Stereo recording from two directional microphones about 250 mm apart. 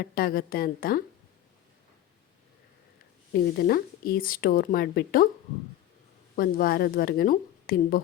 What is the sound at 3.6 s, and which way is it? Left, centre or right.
A woman's voice, left.